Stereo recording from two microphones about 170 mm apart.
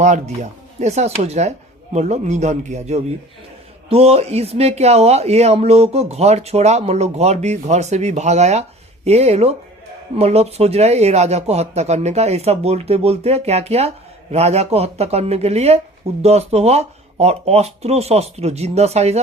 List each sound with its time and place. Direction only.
0.8 s speech: 40° right (ahead or behind)